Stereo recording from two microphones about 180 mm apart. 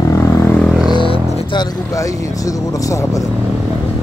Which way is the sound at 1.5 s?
20° left (ahead or behind).